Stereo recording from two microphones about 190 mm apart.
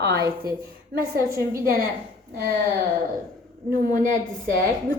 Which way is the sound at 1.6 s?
50° right (ahead or behind).